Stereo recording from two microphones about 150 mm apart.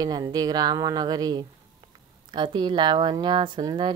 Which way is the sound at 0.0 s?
25° right (ahead or behind).